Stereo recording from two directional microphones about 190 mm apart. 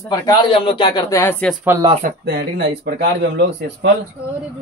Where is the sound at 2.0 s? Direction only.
55° right (ahead or behind).